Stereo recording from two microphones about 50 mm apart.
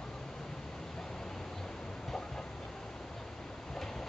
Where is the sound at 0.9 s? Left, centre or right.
Centre.